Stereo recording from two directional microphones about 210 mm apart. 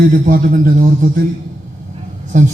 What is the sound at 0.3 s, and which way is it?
Speech, 40° right (ahead or behind).